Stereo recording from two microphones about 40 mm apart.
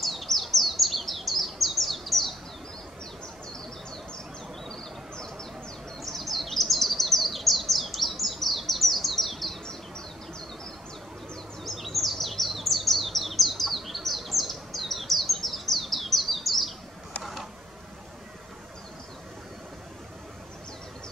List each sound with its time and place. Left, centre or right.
0.0 s bird: centre
4.6 s bird: centre
6.1 s chirp: centre
11.6 s chirp: centre
17.2 s a sound: centre